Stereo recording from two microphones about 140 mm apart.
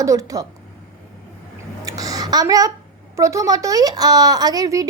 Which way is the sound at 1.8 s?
25° right (ahead or behind).